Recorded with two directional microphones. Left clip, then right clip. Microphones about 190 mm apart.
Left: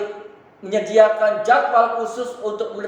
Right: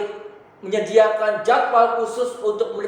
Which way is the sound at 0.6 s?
35° left (ahead or behind).